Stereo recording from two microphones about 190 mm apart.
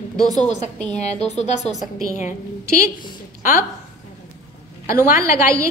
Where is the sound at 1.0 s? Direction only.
35° left (ahead or behind).